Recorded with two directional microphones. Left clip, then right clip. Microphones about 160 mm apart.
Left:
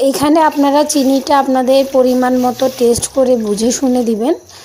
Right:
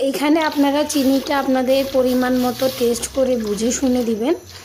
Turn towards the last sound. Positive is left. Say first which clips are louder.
# left 5 dB
turn(degrees=20)  # may be behind; listen again after turning